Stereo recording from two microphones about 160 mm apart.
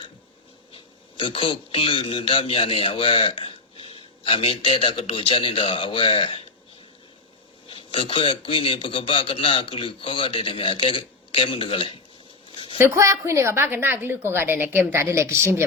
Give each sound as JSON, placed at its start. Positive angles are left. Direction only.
{"t": 1.2, "sound": "a man's voice", "side_deg": 35}
{"t": 7.7, "sound": "a man's voice", "side_deg": 35}
{"t": 12.5, "sound": "a sound", "side_deg": 35}
{"t": 12.8, "sound": "a woman's voice", "side_deg": -20}